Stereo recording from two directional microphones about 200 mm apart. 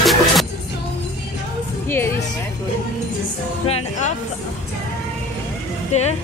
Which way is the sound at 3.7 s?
35° left (ahead or behind).